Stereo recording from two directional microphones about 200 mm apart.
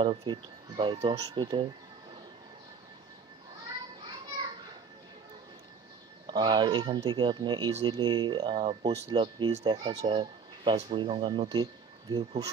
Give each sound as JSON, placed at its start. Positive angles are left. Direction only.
{"t": 0.0, "sound": "speech", "side_deg": -25}
{"t": 6.2, "sound": "speech", "side_deg": -20}